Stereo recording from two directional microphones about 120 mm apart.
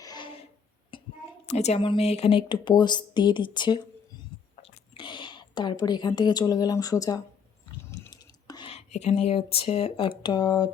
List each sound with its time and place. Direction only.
0.0 s a sound: 35° left (ahead or behind)
1.5 s a woman's voice: 65° left (ahead or behind); by 3.8 s 40° left (ahead or behind)
4.9 s a woman's voice: 40° left (ahead or behind)
8.1 s whispering: 35° left (ahead or behind)
8.7 s speech: 65° left (ahead or behind); by 10.7 s 35° left (ahead or behind)